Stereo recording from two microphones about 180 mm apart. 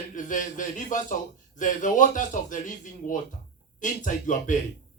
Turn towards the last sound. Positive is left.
turn(degrees=45)  # may be behind; listen again after turning